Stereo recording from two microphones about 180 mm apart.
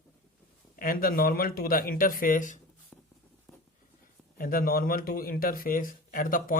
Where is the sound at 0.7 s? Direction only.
55° left (ahead or behind).